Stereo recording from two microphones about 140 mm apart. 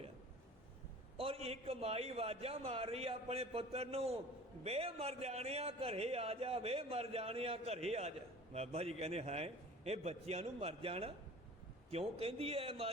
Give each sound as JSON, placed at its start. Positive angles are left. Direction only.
{"t": 1.1, "sound": "a man's voice", "side_deg": -45}